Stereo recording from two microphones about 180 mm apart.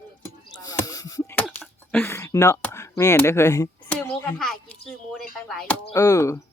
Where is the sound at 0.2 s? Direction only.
20° left (ahead or behind); by 5.7 s 5° left (ahead or behind).